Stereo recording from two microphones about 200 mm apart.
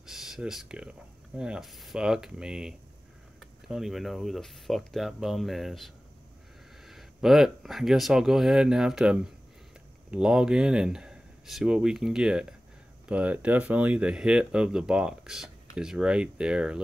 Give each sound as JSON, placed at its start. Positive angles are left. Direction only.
{"t": 0.0, "sound": "rub", "side_deg": 0}
{"t": 3.3, "sound": "speech", "side_deg": 0}
{"t": 6.9, "sound": "speech", "side_deg": 0}